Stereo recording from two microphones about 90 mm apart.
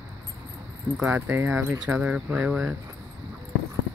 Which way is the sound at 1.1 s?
20° right (ahead or behind).